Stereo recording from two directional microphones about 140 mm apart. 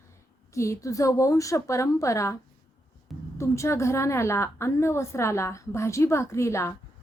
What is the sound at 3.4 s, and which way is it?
A woman's voice, 20° left (ahead or behind).